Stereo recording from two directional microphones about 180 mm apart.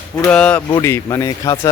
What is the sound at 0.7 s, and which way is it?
Speech, 15° left (ahead or behind).